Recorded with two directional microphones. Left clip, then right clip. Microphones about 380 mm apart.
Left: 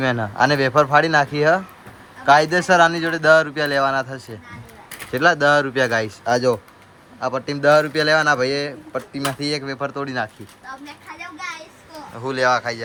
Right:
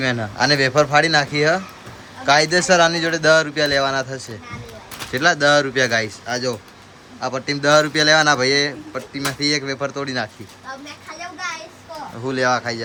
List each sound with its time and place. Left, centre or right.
0.0 s a man's voice: centre
12.1 s a man's voice: centre